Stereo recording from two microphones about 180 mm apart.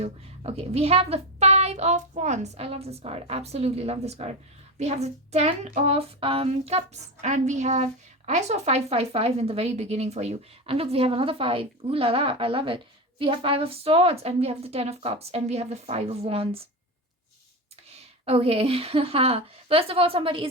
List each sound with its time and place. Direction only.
0.0 s speech: 35° right (ahead or behind)
17.8 s speech: 35° right (ahead or behind)